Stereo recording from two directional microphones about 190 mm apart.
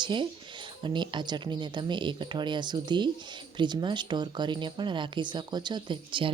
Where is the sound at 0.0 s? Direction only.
25° right (ahead or behind).